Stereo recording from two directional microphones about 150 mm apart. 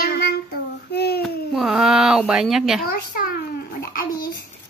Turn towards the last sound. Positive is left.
turn(degrees=85)